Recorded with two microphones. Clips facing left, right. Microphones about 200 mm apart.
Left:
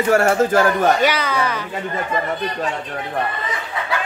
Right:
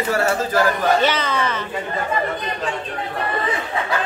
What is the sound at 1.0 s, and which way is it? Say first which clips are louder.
Speech: left 1 dB; 10° left (ahead or behind).